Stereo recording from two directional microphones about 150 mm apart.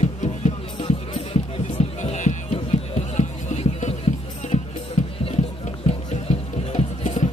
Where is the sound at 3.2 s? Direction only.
50° left (ahead or behind).